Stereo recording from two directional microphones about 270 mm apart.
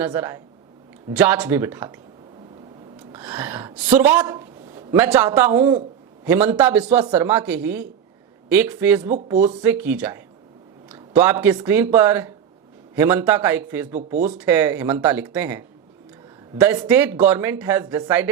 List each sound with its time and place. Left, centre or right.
0.0 s speech: centre
3.1 s a woman's voice: centre
9.0 s speech: right
9.6 s speech: centre